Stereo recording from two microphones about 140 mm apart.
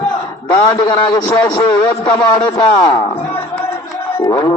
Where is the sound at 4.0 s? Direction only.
20° left (ahead or behind).